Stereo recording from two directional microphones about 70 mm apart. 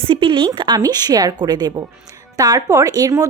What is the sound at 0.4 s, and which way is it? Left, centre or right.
A woman's voice, right.